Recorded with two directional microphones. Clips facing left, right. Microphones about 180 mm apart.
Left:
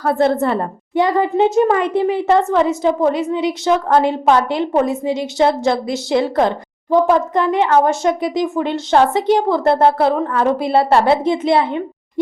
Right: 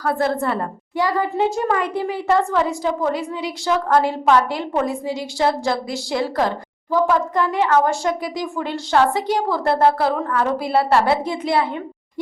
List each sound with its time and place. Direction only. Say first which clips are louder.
0.0 s a woman's voice: left 5 dB; 25° left (ahead or behind)